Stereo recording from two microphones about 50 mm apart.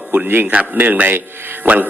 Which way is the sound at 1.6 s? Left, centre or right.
Right.